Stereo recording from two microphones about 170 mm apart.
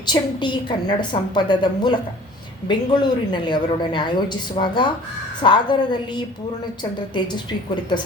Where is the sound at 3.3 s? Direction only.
25° left (ahead or behind).